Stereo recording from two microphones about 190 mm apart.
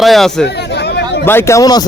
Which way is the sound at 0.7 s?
60° left (ahead or behind).